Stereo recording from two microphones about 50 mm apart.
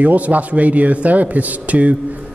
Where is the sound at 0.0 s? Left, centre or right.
Right.